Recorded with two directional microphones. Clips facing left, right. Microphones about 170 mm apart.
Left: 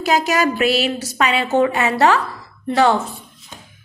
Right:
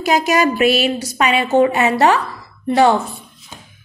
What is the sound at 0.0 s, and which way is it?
A woman's voice, 15° right (ahead or behind).